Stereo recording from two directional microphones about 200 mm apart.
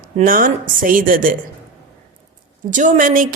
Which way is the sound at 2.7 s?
40° right (ahead or behind).